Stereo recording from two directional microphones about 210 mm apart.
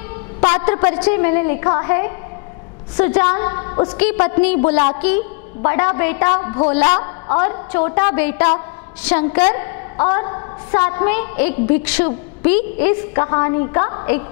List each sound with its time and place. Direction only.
0.5 s a woman's voice: 10° left (ahead or behind)
3.9 s a woman's voice: 10° left (ahead or behind)
6.9 s a woman's voice: 30° left (ahead or behind)
7.3 s a woman's voice: 15° left (ahead or behind)